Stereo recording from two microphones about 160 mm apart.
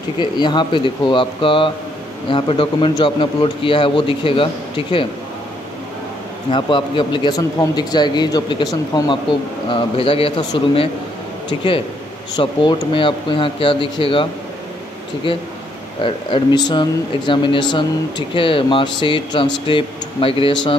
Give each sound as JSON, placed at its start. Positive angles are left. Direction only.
{"t": 0.2, "sound": "speech", "side_deg": 30}
{"t": 6.5, "sound": "a man's voice", "side_deg": 30}
{"t": 12.4, "sound": "speech", "side_deg": 30}
{"t": 15.3, "sound": "speech", "side_deg": 30}